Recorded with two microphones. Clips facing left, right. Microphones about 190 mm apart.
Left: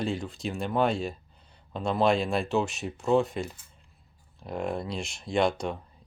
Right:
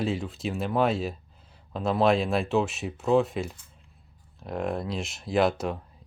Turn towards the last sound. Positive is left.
turn(degrees=0)  # may be behind; listen again after turning